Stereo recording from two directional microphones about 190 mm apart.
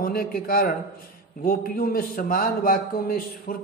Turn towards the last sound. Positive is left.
turn(degrees=50)  # may be behind; listen again after turning